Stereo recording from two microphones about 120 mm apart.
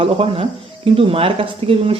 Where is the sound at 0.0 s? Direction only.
50° right (ahead or behind).